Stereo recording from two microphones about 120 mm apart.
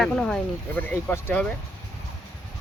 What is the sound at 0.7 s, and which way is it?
Speech, 15° left (ahead or behind).